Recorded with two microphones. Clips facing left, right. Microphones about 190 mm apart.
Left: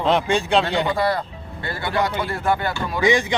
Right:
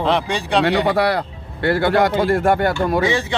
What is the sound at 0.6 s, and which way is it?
Speech, 70° right (ahead or behind).